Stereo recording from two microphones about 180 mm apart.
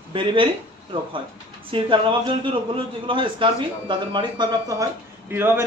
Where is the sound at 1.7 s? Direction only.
30° right (ahead or behind).